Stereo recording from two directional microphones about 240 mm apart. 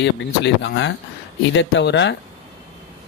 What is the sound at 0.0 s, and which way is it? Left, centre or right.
Speech, left.